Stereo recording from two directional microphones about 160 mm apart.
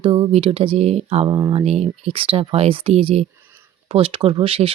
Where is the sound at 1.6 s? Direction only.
40° right (ahead or behind).